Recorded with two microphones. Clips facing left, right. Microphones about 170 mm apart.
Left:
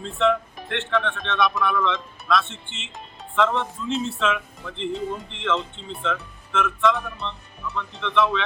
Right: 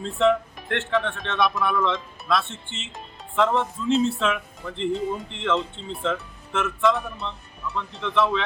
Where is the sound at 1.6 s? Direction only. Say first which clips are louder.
Even; 30° right (ahead or behind).